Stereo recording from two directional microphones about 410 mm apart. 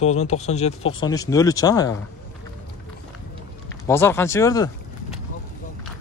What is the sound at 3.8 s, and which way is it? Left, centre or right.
Speech, centre.